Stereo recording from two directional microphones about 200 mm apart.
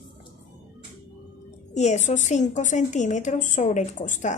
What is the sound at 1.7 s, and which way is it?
A woman's voice, 35° left (ahead or behind).